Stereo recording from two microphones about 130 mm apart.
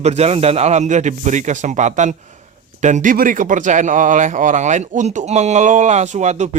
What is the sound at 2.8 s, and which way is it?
Speech, 80° right.